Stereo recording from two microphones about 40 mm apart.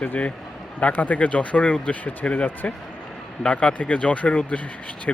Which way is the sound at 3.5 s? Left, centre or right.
Left.